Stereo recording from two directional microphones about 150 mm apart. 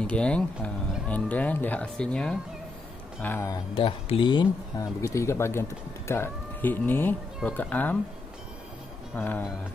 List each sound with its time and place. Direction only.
0.0 s speech: 5° left (ahead or behind)
3.7 s speech: 35° left (ahead or behind)
5.0 s speech: 20° left (ahead or behind)
9.1 s speech: 15° left (ahead or behind)